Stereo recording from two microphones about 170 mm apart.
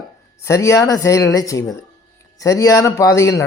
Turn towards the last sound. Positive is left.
turn(degrees=20)  # may be behind; listen again after turning